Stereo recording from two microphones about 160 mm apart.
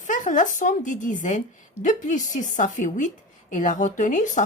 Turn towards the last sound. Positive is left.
turn(degrees=50)  # may be behind; listen again after turning